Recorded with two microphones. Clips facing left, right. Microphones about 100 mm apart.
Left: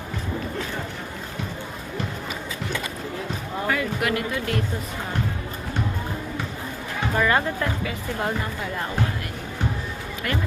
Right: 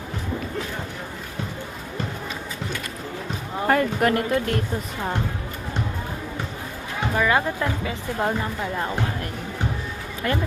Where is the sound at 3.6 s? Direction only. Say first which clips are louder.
Right 5 dB; 40° right (ahead or behind).